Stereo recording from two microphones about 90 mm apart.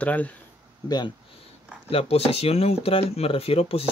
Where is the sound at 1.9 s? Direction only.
90° left.